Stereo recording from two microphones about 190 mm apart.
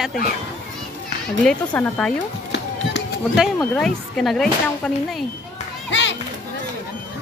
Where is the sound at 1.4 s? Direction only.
5° left (ahead or behind).